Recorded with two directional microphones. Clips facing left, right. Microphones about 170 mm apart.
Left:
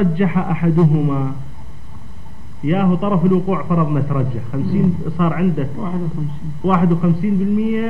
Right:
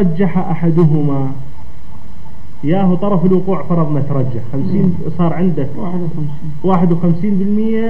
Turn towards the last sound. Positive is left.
turn(degrees=-40)  # may be behind; listen again after turning